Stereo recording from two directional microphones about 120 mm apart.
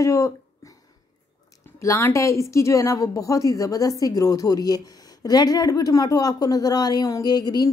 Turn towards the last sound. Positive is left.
turn(degrees=35)  # may be behind; listen again after turning